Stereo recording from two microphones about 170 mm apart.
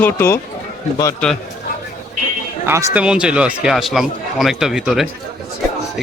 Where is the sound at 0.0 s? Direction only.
15° left (ahead or behind).